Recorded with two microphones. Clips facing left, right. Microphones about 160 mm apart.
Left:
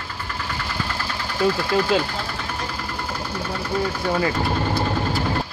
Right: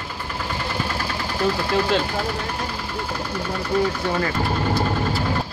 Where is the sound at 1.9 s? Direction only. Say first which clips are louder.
Left 2 dB; 5° left (ahead or behind).